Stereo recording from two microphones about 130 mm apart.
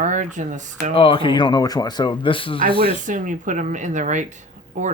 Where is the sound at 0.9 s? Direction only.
40° left (ahead or behind).